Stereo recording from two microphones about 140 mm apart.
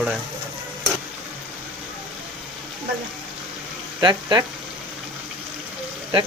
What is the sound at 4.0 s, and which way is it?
Speech, 30° right (ahead or behind).